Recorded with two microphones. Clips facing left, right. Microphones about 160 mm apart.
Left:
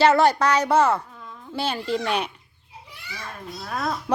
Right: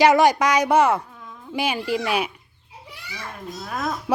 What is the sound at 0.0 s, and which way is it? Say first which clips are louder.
Speech: right 2 dB; 15° right (ahead or behind).